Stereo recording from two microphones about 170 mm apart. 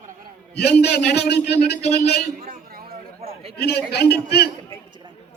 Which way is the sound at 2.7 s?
60° right (ahead or behind).